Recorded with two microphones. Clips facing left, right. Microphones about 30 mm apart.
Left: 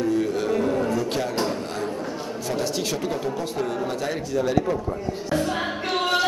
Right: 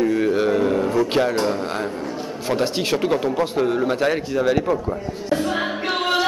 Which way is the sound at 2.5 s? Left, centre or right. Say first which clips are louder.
Right 6 dB; right.